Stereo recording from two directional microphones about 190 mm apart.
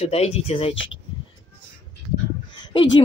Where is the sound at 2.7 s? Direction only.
25° left (ahead or behind).